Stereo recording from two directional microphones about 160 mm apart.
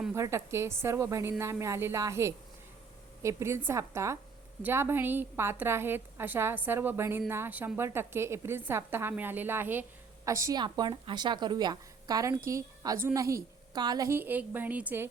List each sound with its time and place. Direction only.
0.1 s a woman's voice: 15° right (ahead or behind)